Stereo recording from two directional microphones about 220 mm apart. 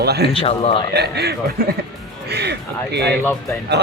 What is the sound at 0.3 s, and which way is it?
Speech, 25° left (ahead or behind).